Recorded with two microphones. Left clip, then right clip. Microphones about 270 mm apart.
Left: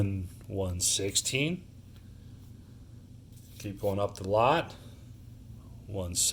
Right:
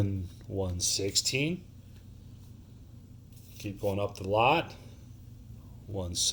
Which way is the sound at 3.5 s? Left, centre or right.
Right.